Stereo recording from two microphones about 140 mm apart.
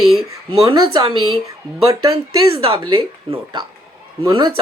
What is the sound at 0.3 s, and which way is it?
Speech, 25° right (ahead or behind).